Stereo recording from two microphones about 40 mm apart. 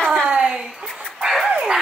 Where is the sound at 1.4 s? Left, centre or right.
Right.